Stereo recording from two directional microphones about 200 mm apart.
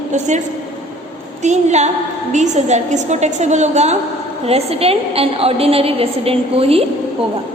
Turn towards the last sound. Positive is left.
turn(degrees=-30)  # may be behind; listen again after turning